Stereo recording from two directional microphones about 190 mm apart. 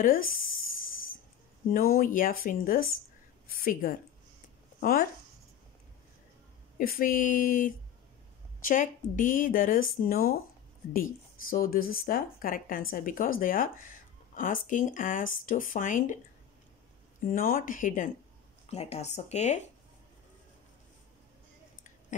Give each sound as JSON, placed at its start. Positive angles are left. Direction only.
{"t": 0.0, "sound": "speech", "side_deg": 50}
{"t": 1.7, "sound": "speech", "side_deg": 50}
{"t": 6.8, "sound": "speech", "side_deg": 50}
{"t": 11.5, "sound": "speech", "side_deg": 50}
{"t": 17.2, "sound": "speech", "side_deg": 45}